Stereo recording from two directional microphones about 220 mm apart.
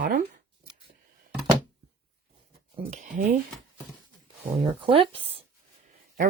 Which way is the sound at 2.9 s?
35° right (ahead or behind).